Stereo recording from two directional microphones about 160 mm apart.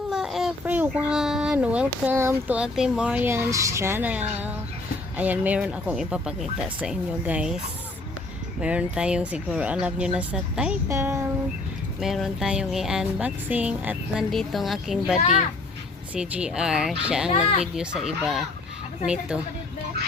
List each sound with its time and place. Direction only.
0.1 s a sound: centre (ahead or behind)
0.6 s speech: 10° right (ahead or behind)
8.6 s speech: 10° right (ahead or behind)
10.8 s speech: 15° right (ahead or behind)
11.9 s speech: centre (ahead or behind)
15.2 s a child's voice: 45° left (ahead or behind)
16.1 s speech: 5° right (ahead or behind)